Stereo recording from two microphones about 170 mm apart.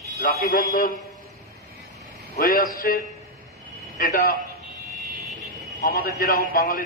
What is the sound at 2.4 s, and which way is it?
A man's voice, 60° left (ahead or behind).